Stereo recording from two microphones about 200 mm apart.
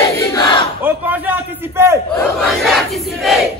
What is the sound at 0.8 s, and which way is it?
A man's voice, 10° right (ahead or behind).